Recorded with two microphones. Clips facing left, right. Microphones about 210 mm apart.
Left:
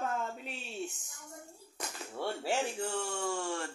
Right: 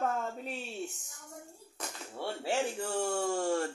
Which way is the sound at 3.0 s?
40° right (ahead or behind).